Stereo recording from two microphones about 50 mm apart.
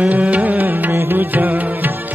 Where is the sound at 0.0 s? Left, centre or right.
Right.